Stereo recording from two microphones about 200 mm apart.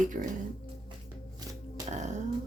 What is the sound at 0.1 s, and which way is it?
Speech, 45° right (ahead or behind).